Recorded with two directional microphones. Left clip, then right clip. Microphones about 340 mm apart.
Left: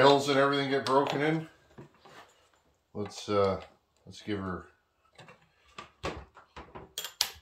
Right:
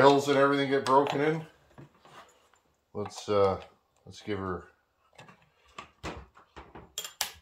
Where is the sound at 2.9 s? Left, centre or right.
Centre.